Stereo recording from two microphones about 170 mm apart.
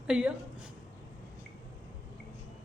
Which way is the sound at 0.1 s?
5° right (ahead or behind).